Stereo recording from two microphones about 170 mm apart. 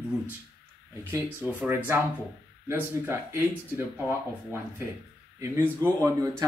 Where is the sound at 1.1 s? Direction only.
10° right (ahead or behind).